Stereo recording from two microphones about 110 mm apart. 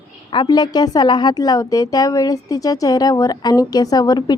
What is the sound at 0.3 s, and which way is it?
A woman's voice, 40° left (ahead or behind).